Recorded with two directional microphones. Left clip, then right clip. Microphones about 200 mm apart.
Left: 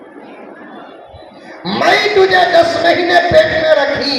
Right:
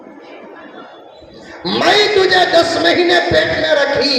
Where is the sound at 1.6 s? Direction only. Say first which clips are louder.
Even; 45° right (ahead or behind).